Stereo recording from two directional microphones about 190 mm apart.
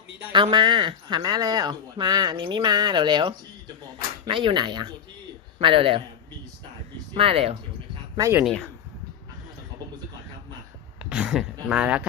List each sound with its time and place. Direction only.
0.3 s speech: 25° right (ahead or behind)
7.1 s speech: 30° right (ahead or behind)
8.1 s speech: 15° right (ahead or behind)
8.4 s speech: 5° left (ahead or behind)
11.1 s speech: 5° right (ahead or behind)